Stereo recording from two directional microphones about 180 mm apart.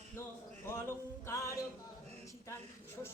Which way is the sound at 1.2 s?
15° left (ahead or behind).